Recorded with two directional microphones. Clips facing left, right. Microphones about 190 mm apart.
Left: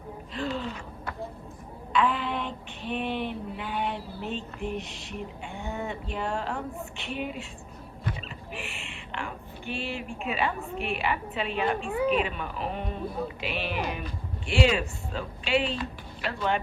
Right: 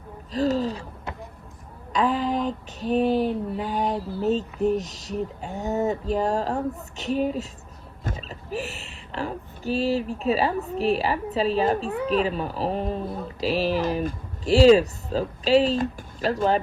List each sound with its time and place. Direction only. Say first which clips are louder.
0.3 s speech: right 9 dB; 40° right (ahead or behind)
1.9 s speech: right 4 dB; 40° right (ahead or behind)